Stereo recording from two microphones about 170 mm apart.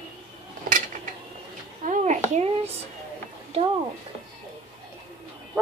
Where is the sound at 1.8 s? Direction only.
45° right (ahead or behind).